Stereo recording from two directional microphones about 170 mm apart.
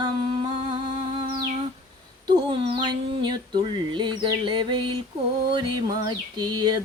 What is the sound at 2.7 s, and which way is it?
Female singing, 25° right (ahead or behind).